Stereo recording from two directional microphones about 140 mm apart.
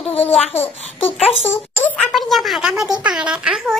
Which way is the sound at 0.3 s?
45° left (ahead or behind).